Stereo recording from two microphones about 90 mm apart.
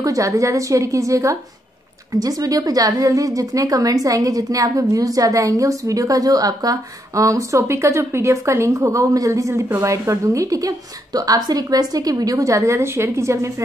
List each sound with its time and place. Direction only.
0.0 s a woman's voice: 40° right (ahead or behind)